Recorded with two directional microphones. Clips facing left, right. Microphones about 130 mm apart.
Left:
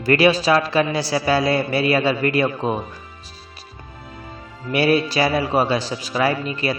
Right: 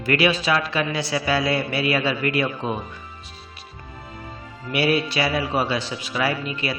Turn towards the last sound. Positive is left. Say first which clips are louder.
# left 4 dB
turn(degrees=40)  # may be behind; listen again after turning